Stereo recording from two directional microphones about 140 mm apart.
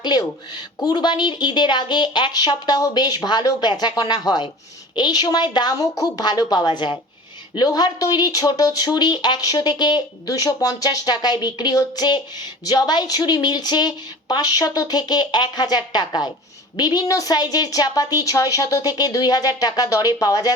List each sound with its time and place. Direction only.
0.0 s a woman's voice: 30° left (ahead or behind)